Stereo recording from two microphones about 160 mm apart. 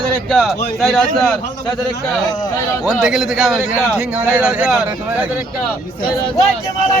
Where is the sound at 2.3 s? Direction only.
25° left (ahead or behind).